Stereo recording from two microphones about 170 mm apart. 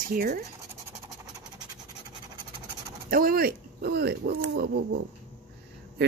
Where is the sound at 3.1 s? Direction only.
60° right (ahead or behind).